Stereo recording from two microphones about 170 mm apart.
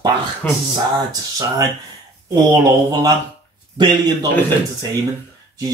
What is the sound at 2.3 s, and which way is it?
Speech, 25° right (ahead or behind).